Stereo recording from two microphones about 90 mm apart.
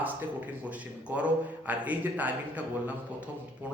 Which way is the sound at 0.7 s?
15° right (ahead or behind).